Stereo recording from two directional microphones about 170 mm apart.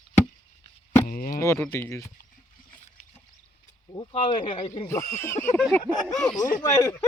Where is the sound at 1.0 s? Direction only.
60° left (ahead or behind).